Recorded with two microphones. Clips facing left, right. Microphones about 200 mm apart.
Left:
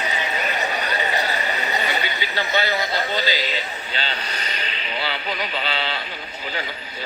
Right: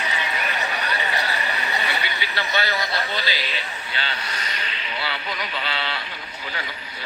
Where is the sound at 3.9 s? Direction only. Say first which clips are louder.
Left 1 dB; 35° left (ahead or behind).